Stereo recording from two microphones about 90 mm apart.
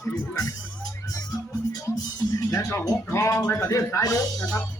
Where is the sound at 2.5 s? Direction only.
30° left (ahead or behind).